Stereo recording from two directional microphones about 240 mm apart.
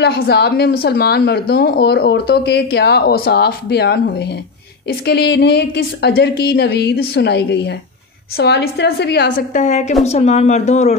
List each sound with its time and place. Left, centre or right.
0.0 s a woman's voice: left